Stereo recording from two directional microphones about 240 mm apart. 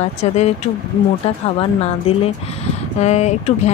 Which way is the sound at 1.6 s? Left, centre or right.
Left.